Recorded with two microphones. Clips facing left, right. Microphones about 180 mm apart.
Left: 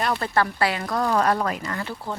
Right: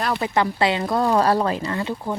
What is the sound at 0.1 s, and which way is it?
Speech, 15° right (ahead or behind).